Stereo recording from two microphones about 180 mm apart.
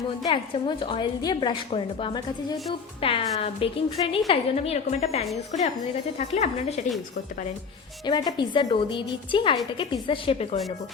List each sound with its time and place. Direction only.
0.2 s a woman's voice: 25° left (ahead or behind)
8.0 s a woman's voice: 25° left (ahead or behind)